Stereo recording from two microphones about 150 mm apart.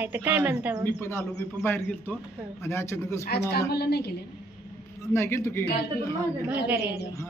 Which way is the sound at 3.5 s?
90° left.